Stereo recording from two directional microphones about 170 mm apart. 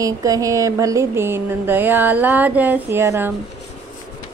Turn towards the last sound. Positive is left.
turn(degrees=-15)  # may be behind; listen again after turning